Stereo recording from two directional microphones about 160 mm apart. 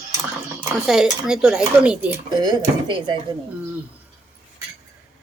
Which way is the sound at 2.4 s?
25° right (ahead or behind).